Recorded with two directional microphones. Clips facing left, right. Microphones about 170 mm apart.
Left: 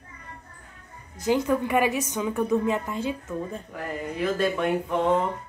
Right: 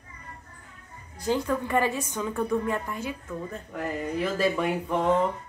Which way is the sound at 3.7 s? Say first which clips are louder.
Right 4 dB; centre (ahead or behind).